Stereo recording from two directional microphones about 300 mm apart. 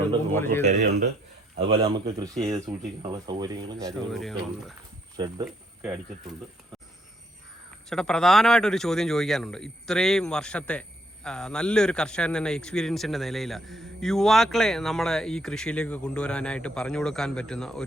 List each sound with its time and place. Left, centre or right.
0.8 s speech: right
1.8 s speech: centre
3.9 s speech: centre
5.1 s speech: centre
5.5 s a sound: centre
7.9 s speech: centre